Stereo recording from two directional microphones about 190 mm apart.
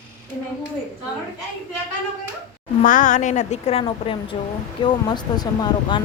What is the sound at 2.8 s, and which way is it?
A woman's voice, 45° left (ahead or behind).